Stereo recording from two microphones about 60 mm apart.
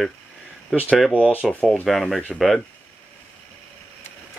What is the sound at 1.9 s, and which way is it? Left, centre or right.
Speech, centre.